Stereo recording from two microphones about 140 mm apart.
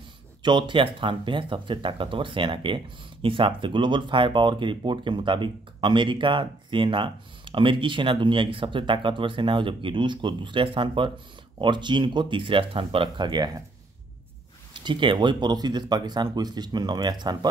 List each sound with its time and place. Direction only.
0.4 s speech: 35° right (ahead or behind)
14.7 s speech: 35° right (ahead or behind)